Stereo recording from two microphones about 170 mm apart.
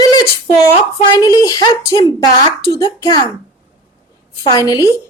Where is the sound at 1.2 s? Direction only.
20° left (ahead or behind).